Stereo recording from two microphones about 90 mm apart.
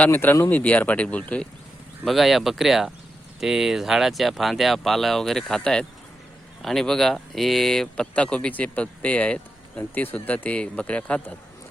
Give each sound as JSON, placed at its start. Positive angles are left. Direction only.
{"t": 0.0, "sound": "speech", "side_deg": 20}
{"t": 2.0, "sound": "speech", "side_deg": 0}